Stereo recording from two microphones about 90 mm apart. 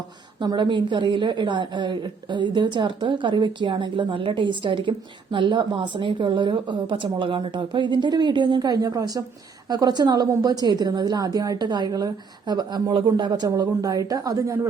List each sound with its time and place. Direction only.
0.3 s a woman's voice: 60° right (ahead or behind)
13.5 s a woman's voice: 40° right (ahead or behind)